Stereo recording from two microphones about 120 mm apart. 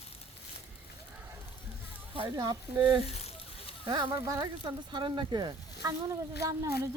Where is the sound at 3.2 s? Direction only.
60° left (ahead or behind).